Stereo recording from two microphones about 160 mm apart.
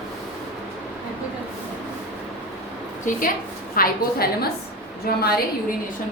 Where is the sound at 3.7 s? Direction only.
70° left (ahead or behind).